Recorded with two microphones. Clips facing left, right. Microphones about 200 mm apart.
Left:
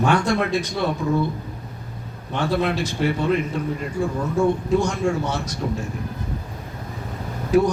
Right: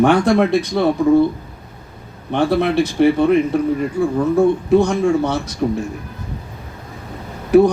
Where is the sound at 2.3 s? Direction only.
60° right (ahead or behind).